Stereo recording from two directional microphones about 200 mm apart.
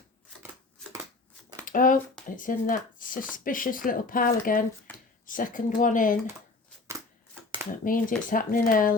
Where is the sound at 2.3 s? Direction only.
40° left (ahead or behind).